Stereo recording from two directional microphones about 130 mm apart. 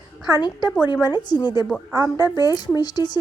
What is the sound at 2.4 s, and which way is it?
Speech, 30° left (ahead or behind).